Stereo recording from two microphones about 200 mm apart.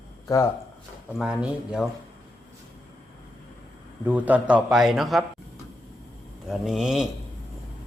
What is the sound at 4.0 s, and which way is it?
A man's voice, 10° right (ahead or behind).